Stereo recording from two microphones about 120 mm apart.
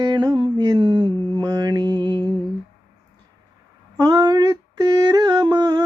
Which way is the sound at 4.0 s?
30° right (ahead or behind).